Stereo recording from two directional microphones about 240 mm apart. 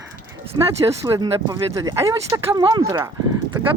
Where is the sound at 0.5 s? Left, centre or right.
Centre.